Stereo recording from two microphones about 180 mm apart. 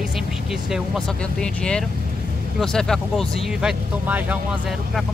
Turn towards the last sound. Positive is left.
turn(degrees=-10)  # may be behind; listen again after turning